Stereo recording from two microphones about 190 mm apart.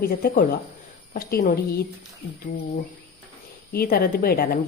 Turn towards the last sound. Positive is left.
turn(degrees=50)  # may be behind; listen again after turning